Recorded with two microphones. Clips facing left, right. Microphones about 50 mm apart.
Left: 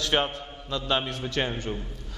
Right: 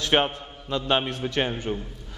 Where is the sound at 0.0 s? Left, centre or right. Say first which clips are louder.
Right 3 dB; right.